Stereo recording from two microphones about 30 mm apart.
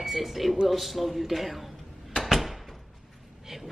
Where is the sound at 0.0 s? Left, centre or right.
Centre.